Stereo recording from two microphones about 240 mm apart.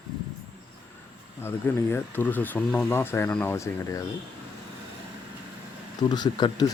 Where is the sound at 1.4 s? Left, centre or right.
Centre.